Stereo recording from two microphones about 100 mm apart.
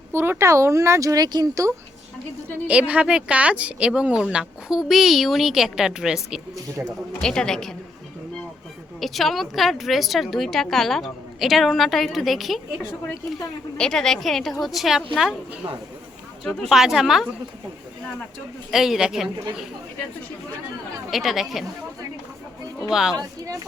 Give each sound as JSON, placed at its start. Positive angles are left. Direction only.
{"t": 0.1, "sound": "speech", "side_deg": -25}
{"t": 2.6, "sound": "speech", "side_deg": -15}
{"t": 7.2, "sound": "speech", "side_deg": 5}
{"t": 9.0, "sound": "speech", "side_deg": 0}
{"t": 13.7, "sound": "speech", "side_deg": 5}
{"t": 16.4, "sound": "speech", "side_deg": 0}
{"t": 18.7, "sound": "speech", "side_deg": -5}
{"t": 21.1, "sound": "speech", "side_deg": 0}
{"t": 22.8, "sound": "speech", "side_deg": -5}